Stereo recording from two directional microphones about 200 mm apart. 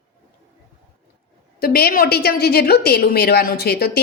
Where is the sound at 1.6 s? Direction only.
50° left (ahead or behind).